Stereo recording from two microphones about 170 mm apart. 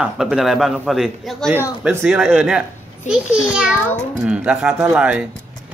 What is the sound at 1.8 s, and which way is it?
A man's voice, 10° right (ahead or behind).